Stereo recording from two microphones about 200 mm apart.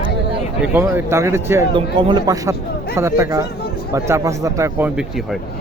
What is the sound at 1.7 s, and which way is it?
A man's voice, 25° right (ahead or behind).